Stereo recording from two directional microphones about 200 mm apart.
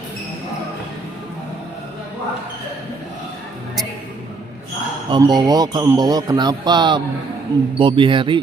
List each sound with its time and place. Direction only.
5.0 s speech: 20° right (ahead or behind)